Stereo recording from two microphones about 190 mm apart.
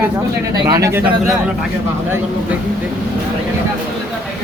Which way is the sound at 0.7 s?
15° right (ahead or behind).